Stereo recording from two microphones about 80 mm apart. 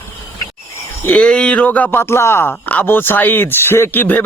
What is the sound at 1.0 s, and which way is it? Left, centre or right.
Speech, centre.